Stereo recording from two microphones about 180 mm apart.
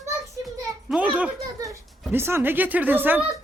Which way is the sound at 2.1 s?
15° right (ahead or behind).